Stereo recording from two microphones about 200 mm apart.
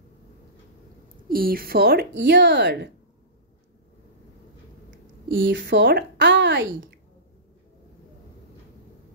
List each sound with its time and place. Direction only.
1.0 s speech: 45° right (ahead or behind)
4.9 s a woman's voice: 70° right (ahead or behind)